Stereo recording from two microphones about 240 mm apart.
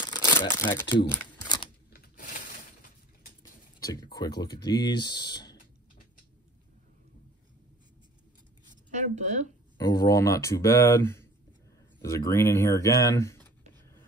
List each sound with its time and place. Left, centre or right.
0.1 s crumpling: centre
1.9 s a sound: left
3.8 s speech: centre
8.9 s speech: right
9.8 s speech: centre